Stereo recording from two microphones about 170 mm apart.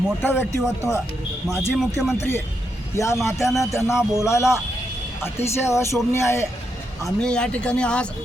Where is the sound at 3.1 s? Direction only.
Centre (ahead or behind).